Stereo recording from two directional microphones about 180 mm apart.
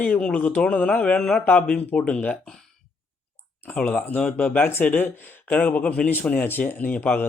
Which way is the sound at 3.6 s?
10° left (ahead or behind).